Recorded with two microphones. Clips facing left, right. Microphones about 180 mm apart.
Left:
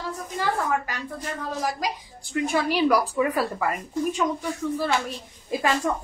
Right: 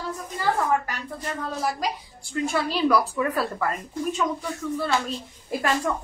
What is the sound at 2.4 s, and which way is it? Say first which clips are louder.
A woman's voice: left 1 dB; 15° left (ahead or behind).